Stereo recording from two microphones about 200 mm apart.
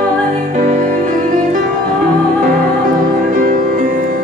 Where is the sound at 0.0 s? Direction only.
40° right (ahead or behind).